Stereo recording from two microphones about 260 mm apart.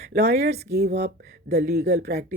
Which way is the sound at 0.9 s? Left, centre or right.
Right.